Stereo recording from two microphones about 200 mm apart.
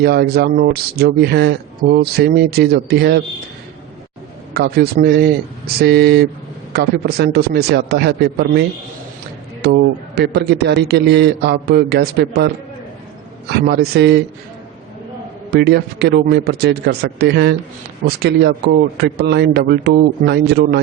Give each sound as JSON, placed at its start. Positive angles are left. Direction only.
{"t": 0.0, "sound": "speech", "side_deg": -55}
{"t": 4.5, "sound": "speech", "side_deg": -50}
{"t": 9.6, "sound": "speech", "side_deg": -55}
{"t": 13.5, "sound": "speech", "side_deg": -55}
{"t": 15.4, "sound": "speech", "side_deg": -55}